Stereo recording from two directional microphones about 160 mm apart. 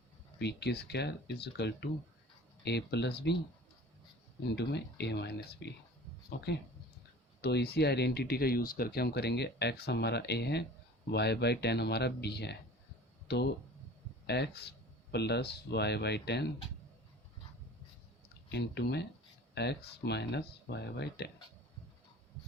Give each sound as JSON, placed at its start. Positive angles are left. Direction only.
{"t": 0.3, "sound": "speech", "side_deg": 90}
{"t": 4.5, "sound": "speech", "side_deg": 90}
{"t": 18.4, "sound": "speech", "side_deg": 90}